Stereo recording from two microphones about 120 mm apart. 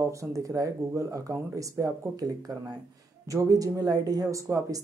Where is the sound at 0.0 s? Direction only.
25° right (ahead or behind).